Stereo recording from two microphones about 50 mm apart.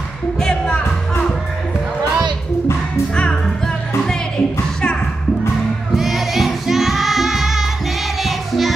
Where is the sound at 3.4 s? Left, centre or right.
Centre.